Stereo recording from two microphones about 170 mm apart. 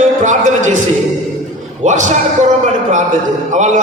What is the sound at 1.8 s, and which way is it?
A man's voice, 45° right (ahead or behind).